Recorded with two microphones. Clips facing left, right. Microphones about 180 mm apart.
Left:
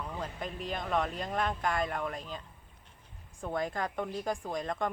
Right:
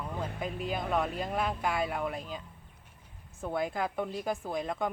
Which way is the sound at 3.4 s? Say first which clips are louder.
Right 2 dB; 5° right (ahead or behind).